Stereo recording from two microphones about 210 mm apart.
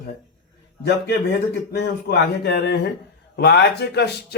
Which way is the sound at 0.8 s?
50° left (ahead or behind).